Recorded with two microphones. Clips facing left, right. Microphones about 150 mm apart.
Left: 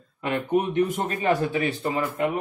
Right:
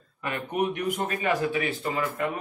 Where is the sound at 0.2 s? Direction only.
25° left (ahead or behind).